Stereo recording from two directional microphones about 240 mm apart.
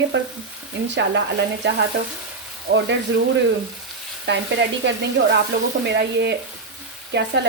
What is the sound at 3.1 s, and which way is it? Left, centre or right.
Frying, right.